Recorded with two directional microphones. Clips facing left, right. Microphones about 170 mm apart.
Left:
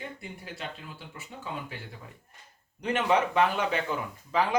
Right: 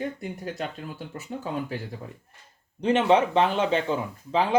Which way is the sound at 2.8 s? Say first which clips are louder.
Right 5 dB; 30° right (ahead or behind).